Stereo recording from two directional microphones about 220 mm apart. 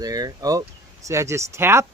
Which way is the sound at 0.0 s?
15° right (ahead or behind).